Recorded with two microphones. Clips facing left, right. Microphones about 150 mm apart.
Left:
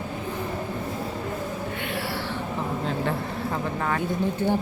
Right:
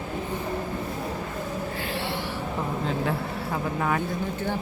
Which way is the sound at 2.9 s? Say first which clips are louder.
Even; 5° right (ahead or behind).